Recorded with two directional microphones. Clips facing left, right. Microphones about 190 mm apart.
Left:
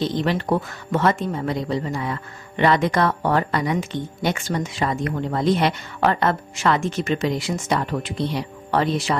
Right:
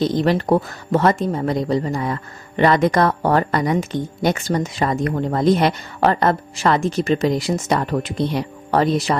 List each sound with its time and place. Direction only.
0.0 s speech: 40° right (ahead or behind)